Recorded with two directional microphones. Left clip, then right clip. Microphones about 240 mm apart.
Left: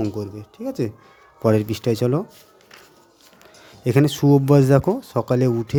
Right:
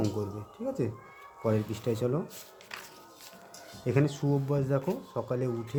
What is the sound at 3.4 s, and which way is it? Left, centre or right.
Speech, left.